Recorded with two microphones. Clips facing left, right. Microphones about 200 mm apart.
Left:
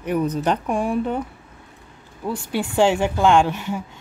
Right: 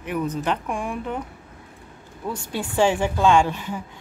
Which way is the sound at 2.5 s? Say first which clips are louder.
Left 2 dB; 15° left (ahead or behind).